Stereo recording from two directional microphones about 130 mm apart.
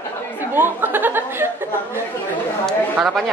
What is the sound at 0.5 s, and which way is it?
Speech, 15° right (ahead or behind).